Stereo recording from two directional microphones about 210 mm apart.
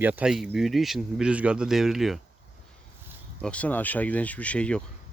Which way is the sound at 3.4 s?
5° left (ahead or behind).